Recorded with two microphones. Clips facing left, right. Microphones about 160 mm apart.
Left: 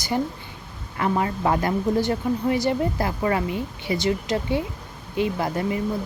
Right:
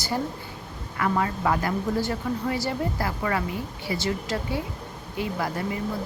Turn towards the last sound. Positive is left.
turn(degrees=20)  # may be behind; listen again after turning